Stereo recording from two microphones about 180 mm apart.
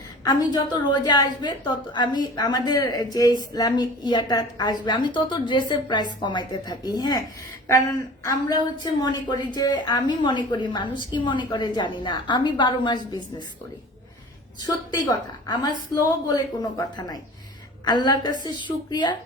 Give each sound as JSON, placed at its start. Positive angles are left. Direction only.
{"t": 0.3, "sound": "a woman's voice", "side_deg": 25}
{"t": 14.6, "sound": "a woman's voice", "side_deg": 25}